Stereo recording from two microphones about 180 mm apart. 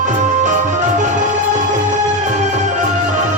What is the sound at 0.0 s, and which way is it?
Music, 40° right (ahead or behind).